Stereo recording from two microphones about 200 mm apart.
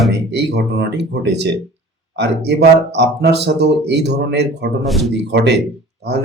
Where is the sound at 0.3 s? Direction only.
55° right (ahead or behind).